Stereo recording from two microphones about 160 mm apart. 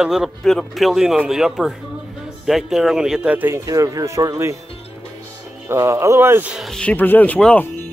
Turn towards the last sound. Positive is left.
turn(degrees=10)  # may be behind; listen again after turning